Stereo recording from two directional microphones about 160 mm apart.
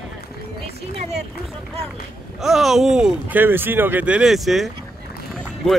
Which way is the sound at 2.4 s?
Centre (ahead or behind).